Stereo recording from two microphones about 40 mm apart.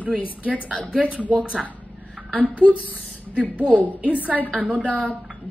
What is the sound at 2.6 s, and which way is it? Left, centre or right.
Speech, left.